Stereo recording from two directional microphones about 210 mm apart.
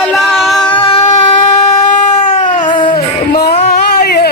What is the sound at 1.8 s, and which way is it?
Cat, 35° left (ahead or behind).